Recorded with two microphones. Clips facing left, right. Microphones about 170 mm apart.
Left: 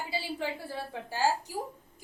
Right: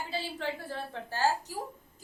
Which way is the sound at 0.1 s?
10° left (ahead or behind).